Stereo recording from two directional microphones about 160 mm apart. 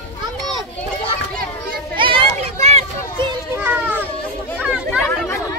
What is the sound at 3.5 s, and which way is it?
Music, 10° right (ahead or behind).